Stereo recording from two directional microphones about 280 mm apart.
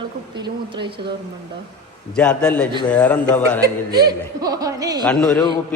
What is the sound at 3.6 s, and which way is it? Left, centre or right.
A woman's voice, centre.